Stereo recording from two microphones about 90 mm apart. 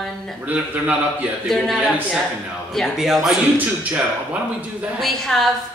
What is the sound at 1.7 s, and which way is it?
A man's voice, 5° right (ahead or behind).